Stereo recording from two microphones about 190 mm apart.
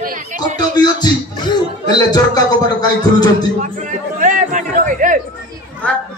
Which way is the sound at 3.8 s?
40° right (ahead or behind).